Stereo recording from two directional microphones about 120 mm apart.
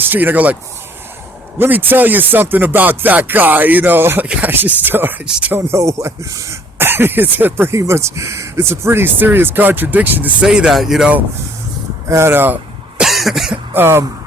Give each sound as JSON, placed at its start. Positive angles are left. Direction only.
{"t": 0.0, "sound": "speech", "side_deg": -15}
{"t": 1.5, "sound": "speech", "side_deg": -15}
{"t": 12.0, "sound": "speech", "side_deg": -20}
{"t": 13.0, "sound": "cough", "side_deg": 0}
{"t": 13.7, "sound": "speech", "side_deg": -20}